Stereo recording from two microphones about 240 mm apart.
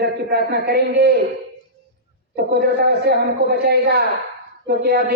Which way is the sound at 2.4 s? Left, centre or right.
Right.